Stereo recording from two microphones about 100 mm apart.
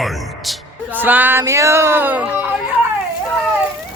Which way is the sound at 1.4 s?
30° right (ahead or behind).